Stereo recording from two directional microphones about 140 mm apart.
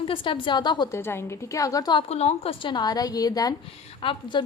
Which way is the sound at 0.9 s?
15° left (ahead or behind).